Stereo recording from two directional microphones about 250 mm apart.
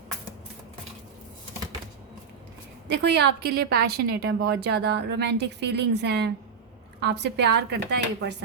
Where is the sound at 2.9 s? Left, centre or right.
Right.